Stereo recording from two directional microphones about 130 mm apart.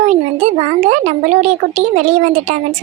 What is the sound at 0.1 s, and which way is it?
Speech, 60° right (ahead or behind).